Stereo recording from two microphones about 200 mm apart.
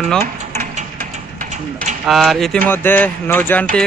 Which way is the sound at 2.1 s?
Centre (ahead or behind).